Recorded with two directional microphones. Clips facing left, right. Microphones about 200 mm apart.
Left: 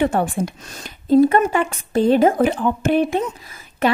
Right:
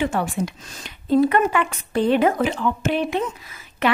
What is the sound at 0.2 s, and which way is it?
A woman's voice, 45° left (ahead or behind).